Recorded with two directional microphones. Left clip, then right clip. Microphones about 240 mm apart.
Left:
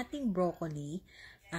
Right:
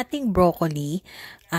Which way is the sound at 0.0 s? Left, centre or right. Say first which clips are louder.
Right 13 dB; right.